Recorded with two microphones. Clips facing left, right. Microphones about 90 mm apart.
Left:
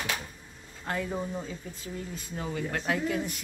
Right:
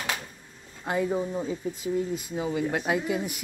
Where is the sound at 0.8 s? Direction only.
15° right (ahead or behind).